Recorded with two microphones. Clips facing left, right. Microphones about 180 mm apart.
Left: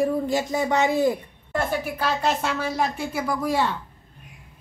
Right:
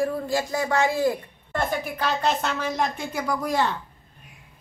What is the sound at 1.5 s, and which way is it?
Speech, 5° left (ahead or behind).